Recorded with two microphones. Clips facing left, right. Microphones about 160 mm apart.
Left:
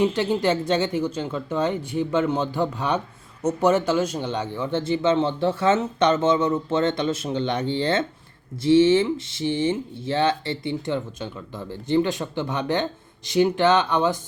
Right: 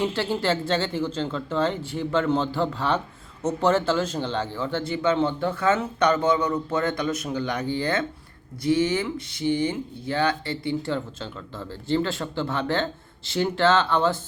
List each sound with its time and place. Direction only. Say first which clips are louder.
0.0 s a man's voice: left 4 dB; 20° left (ahead or behind)